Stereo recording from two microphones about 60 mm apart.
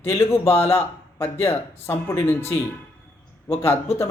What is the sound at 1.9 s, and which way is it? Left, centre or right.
Speech, left.